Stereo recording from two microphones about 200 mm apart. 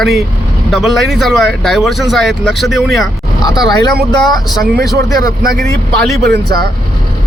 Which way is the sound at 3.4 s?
20° left (ahead or behind).